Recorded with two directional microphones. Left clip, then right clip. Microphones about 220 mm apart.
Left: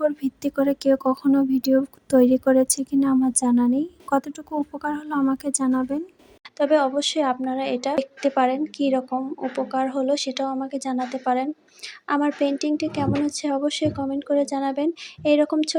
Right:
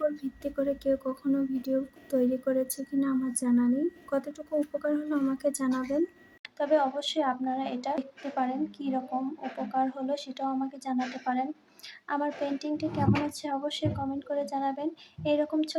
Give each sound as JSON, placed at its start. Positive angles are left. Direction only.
{"t": 0.2, "sound": "a woman's voice", "side_deg": 45}
{"t": 4.8, "sound": "a woman's voice", "side_deg": 40}
{"t": 6.6, "sound": "a woman's voice", "side_deg": 25}